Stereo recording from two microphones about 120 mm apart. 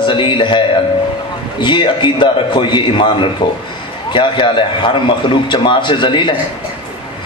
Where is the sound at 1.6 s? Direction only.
40° left (ahead or behind).